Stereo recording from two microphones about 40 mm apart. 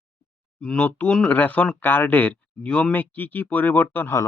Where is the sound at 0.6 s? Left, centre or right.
Left.